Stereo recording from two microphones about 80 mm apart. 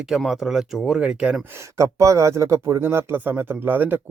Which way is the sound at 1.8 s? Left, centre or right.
Right.